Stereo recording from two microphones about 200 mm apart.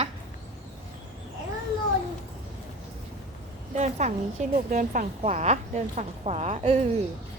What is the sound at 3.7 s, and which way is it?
A woman's voice, 35° right (ahead or behind).